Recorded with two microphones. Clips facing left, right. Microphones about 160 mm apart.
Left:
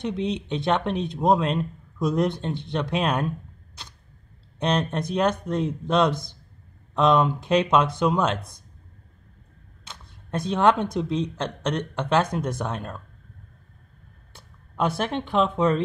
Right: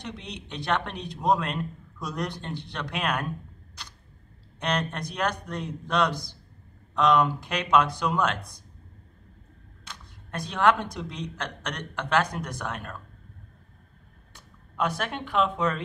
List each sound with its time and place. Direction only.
0.2 s speech: 25° left (ahead or behind)
4.6 s speech: 30° left (ahead or behind)
9.8 s speech: 25° left (ahead or behind)
14.3 s speech: 30° left (ahead or behind)